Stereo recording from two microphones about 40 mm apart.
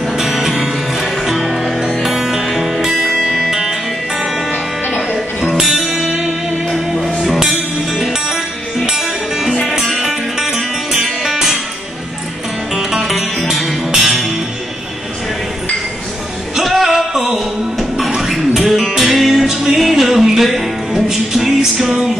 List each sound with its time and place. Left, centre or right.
0.2 s music: centre
5.6 s music: centre
7.9 s music: centre
12.7 s music: centre
16.5 s music: centre